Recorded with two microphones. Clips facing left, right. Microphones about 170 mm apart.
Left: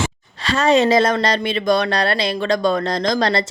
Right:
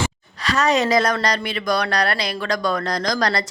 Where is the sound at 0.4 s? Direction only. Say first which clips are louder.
Left 4 dB; 25° left (ahead or behind).